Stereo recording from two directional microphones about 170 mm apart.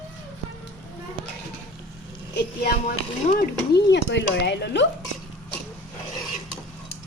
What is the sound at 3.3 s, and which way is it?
Speech, 65° left (ahead or behind).